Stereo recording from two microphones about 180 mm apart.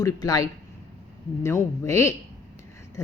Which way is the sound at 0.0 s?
20° left (ahead or behind).